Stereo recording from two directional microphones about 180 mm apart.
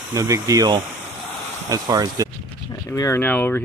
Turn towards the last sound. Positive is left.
turn(degrees=10)  # may be behind; listen again after turning